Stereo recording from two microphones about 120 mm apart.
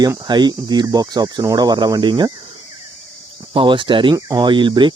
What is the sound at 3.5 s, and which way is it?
Speech, 45° right (ahead or behind).